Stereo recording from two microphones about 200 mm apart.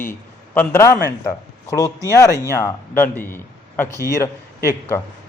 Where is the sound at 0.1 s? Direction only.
10° left (ahead or behind).